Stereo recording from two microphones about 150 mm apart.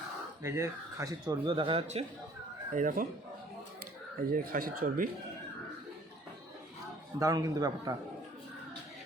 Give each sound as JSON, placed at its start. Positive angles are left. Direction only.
{"t": 0.4, "sound": "speech", "side_deg": -20}
{"t": 1.3, "sound": "speech", "side_deg": -35}
{"t": 2.7, "sound": "speech", "side_deg": -65}
{"t": 4.3, "sound": "speech", "side_deg": -70}
{"t": 7.2, "sound": "a man's voice", "side_deg": -20}